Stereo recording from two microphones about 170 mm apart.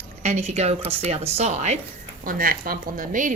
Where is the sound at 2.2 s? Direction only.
55° right (ahead or behind).